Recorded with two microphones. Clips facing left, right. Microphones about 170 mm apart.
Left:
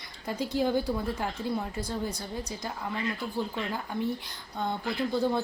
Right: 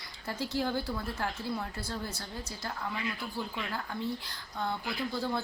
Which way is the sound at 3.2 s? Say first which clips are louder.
Left 5 dB; 15° left (ahead or behind).